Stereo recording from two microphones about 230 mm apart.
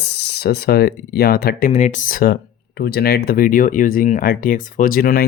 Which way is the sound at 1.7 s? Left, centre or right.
Left.